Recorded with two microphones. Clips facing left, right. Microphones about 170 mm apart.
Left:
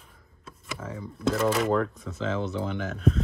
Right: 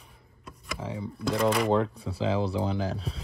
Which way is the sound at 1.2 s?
Centre (ahead or behind).